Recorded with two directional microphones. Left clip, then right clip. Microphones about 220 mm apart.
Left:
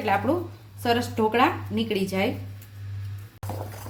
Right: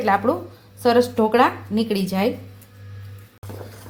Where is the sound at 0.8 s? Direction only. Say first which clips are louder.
Right 7 dB; 25° right (ahead or behind).